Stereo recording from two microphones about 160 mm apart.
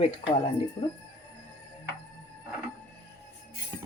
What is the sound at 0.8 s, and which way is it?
Speech, 30° left (ahead or behind).